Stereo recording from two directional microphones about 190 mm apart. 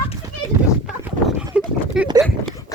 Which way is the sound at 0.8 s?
Centre (ahead or behind).